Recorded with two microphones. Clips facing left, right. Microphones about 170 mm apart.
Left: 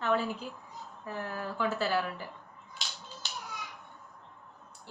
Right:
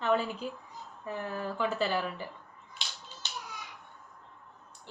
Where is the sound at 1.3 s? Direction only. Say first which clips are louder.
Right 1 dB; 5° left (ahead or behind).